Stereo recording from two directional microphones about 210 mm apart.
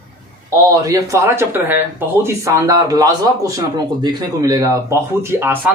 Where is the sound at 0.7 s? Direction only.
15° right (ahead or behind).